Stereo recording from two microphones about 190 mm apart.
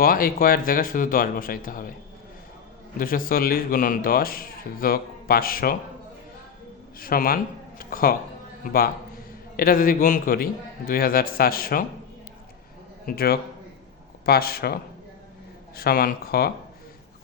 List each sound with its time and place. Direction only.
0.0 s a man's voice: 50° left (ahead or behind)
3.0 s a man's voice: 45° left (ahead or behind)
7.0 s a man's voice: 50° left (ahead or behind)
9.6 s a man's voice: 50° left (ahead or behind)
13.1 s a man's voice: 50° left (ahead or behind)